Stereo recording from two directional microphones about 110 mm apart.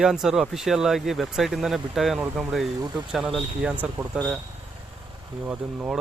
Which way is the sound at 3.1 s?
5° right (ahead or behind).